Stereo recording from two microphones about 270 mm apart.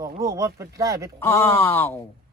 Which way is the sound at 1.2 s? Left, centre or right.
Centre.